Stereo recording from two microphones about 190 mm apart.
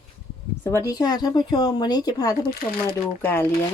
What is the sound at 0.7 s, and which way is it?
Speech, 20° left (ahead or behind).